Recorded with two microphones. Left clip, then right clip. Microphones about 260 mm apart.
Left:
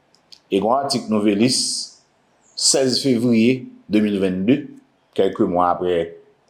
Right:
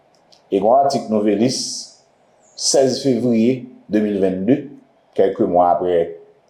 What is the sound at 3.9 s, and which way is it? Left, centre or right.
Speech, left.